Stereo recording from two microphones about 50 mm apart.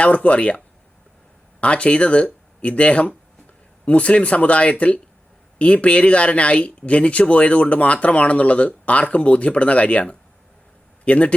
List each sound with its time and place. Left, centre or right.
0.0 s speech: left
1.6 s a man's voice: left